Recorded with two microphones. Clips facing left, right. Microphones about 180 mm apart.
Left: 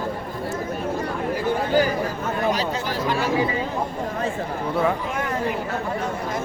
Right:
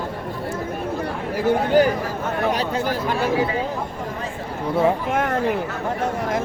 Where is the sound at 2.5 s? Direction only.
55° right (ahead or behind).